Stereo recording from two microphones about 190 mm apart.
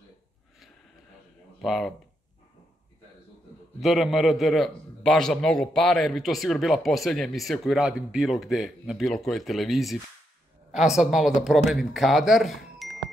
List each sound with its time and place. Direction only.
1.6 s a man's voice: centre (ahead or behind)
3.8 s a man's voice: centre (ahead or behind)